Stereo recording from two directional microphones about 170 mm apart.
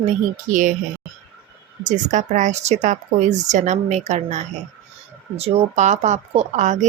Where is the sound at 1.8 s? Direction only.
45° right (ahead or behind).